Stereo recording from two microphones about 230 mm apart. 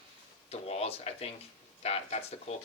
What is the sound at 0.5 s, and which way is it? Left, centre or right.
Speech, left.